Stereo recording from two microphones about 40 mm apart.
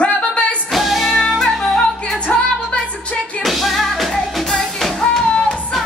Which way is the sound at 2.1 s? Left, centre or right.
Left.